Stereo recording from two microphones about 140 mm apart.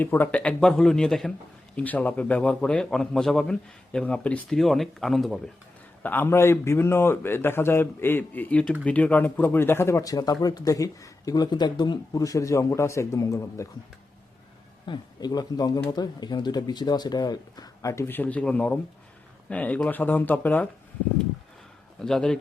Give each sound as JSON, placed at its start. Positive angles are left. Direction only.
{"t": 0.0, "sound": "a man's voice", "side_deg": 15}
{"t": 6.0, "sound": "a man's voice", "side_deg": 15}
{"t": 14.8, "sound": "a man's voice", "side_deg": 30}
{"t": 22.0, "sound": "a man's voice", "side_deg": 5}